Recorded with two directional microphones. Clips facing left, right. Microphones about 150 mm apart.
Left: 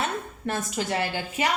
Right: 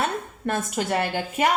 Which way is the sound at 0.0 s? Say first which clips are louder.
Right 3 dB; 50° right (ahead or behind).